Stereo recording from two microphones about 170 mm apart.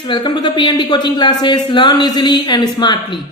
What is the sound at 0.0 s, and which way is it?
Speech, 30° left (ahead or behind).